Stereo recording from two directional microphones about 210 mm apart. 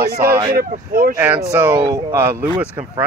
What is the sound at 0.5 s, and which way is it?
Speech, 45° right (ahead or behind).